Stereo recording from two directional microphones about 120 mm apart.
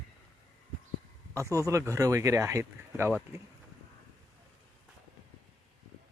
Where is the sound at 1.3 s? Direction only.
25° right (ahead or behind).